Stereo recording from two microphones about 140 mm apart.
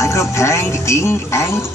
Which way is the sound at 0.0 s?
20° left (ahead or behind).